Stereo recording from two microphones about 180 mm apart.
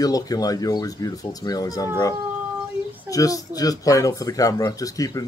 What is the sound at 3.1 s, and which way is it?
Speech, 20° left (ahead or behind).